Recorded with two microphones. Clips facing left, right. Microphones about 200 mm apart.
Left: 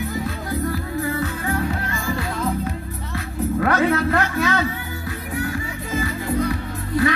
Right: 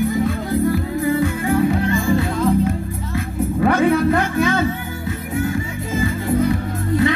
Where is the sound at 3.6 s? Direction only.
15° right (ahead or behind).